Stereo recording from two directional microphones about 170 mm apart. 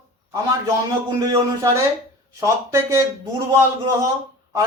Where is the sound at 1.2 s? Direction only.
20° right (ahead or behind).